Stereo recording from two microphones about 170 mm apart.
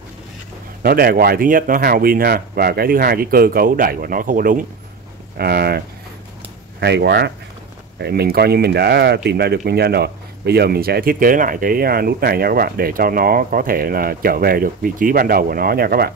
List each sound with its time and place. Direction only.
0.8 s speech: 60° right (ahead or behind)
5.4 s speech: 65° right (ahead or behind)